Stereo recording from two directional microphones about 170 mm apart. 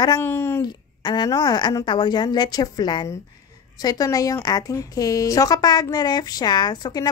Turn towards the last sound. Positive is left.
turn(degrees=25)  # may be behind; listen again after turning